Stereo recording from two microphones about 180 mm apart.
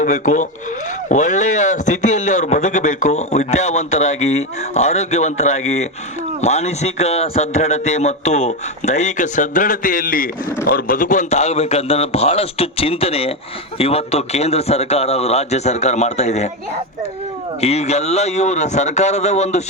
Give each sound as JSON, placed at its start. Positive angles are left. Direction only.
{"t": 0.0, "sound": "a man's voice", "side_deg": 45}
{"t": 17.6, "sound": "a man's voice", "side_deg": 35}